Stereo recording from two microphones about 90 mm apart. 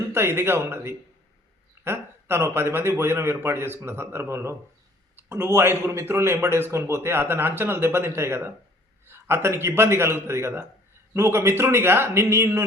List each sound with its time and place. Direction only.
0.1 s a man's voice: 30° right (ahead or behind)